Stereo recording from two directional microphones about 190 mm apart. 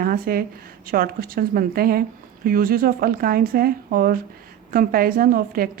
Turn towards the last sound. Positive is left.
turn(degrees=-50)  # may be behind; listen again after turning